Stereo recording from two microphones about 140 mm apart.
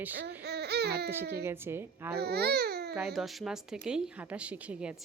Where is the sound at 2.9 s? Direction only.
Centre (ahead or behind).